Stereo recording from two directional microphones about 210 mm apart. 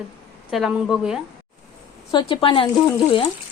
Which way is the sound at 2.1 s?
20° left (ahead or behind).